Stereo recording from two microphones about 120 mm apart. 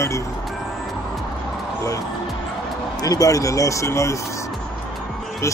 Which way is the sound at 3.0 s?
30° left (ahead or behind).